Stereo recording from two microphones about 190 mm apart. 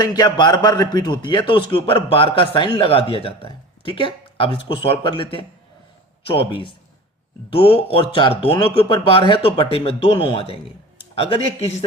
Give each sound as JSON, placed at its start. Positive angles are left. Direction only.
{"t": 0.0, "sound": "a man's voice", "side_deg": 20}